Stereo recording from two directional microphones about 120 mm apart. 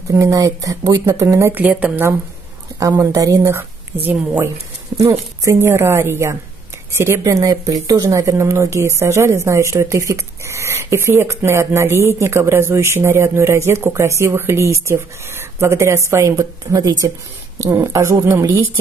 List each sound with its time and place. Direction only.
0.1 s speech: 25° right (ahead or behind)
2.8 s speech: 25° right (ahead or behind)
17.6 s speech: 20° right (ahead or behind)